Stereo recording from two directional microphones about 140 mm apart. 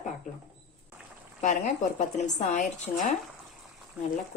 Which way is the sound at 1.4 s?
60° left (ahead or behind).